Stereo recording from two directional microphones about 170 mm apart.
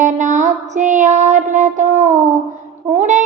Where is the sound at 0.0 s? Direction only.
45° right (ahead or behind).